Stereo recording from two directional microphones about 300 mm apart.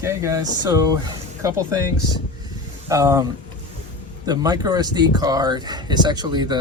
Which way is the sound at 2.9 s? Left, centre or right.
Centre.